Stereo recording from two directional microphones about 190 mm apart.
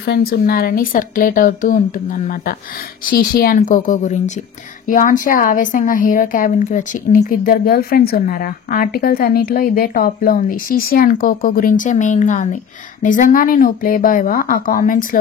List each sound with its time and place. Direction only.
0.0 s a woman's voice: 60° left (ahead or behind)